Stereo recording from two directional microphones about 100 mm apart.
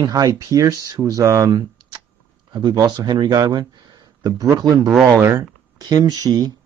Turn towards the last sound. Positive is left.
turn(degrees=-40)  # may be behind; listen again after turning